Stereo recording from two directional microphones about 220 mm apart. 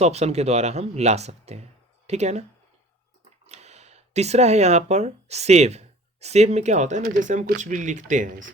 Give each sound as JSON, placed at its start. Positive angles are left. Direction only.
{"t": 0.0, "sound": "speech", "side_deg": -30}
{"t": 3.5, "sound": "speech", "side_deg": -30}